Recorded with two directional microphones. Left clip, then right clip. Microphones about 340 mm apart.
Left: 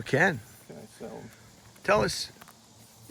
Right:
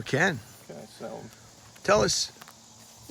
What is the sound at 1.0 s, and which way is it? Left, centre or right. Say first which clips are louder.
Speech: right 3 dB; right.